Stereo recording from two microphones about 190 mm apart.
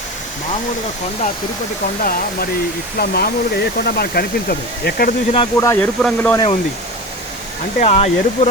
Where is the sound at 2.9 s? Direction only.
55° left (ahead or behind).